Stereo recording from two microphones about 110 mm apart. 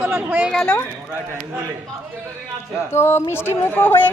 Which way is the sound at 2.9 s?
20° left (ahead or behind).